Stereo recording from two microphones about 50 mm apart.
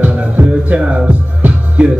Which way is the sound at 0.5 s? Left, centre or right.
Right.